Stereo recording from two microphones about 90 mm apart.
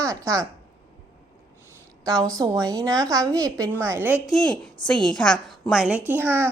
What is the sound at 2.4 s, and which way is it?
A woman's voice, 40° right (ahead or behind).